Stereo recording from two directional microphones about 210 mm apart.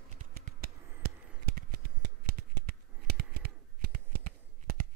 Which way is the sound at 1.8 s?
45° right (ahead or behind).